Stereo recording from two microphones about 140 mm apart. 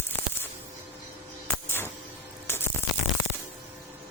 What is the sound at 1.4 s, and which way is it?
Music, 15° left (ahead or behind).